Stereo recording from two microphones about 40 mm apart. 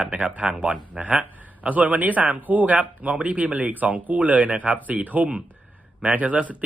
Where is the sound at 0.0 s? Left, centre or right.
Right.